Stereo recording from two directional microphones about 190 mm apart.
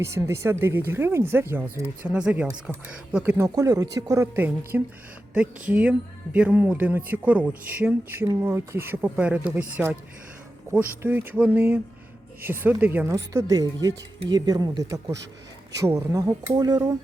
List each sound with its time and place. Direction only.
0.0 s speech: 15° right (ahead or behind)
11.0 s speech: 10° right (ahead or behind)